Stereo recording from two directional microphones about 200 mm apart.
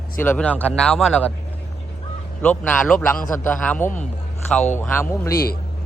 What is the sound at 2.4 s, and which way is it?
Speech, 5° left (ahead or behind).